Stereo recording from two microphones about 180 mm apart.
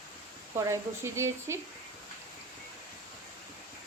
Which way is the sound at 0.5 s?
15° right (ahead or behind).